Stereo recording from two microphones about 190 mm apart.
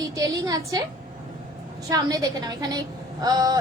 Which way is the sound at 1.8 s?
20° right (ahead or behind).